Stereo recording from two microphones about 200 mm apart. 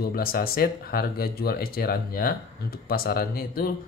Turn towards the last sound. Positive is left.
turn(degrees=50)  # may be behind; listen again after turning